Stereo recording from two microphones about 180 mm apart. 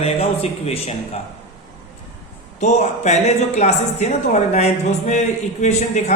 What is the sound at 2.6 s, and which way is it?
A woman's voice, 40° left (ahead or behind).